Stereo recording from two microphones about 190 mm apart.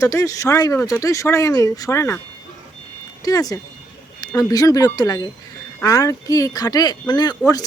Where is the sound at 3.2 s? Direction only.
20° left (ahead or behind).